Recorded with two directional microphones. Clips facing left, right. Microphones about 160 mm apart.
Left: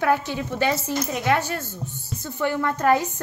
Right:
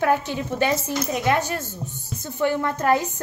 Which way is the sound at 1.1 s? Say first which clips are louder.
Right 1 dB; 20° right (ahead or behind).